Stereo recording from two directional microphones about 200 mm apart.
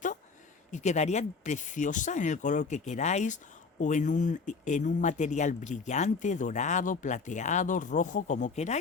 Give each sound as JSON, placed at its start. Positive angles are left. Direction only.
{"t": 0.7, "sound": "speech", "side_deg": 35}